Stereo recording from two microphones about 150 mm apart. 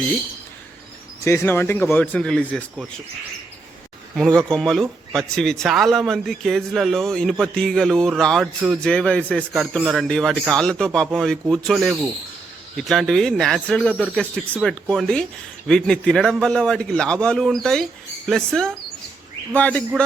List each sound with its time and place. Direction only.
1.2 s speech: 20° left (ahead or behind)
4.1 s speech: centre (ahead or behind)